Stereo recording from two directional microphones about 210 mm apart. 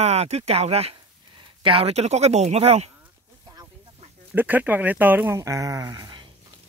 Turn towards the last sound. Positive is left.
turn(degrees=-15)  # may be behind; listen again after turning